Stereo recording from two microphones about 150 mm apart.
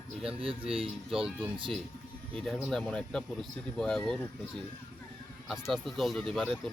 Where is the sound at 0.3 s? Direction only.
40° right (ahead or behind).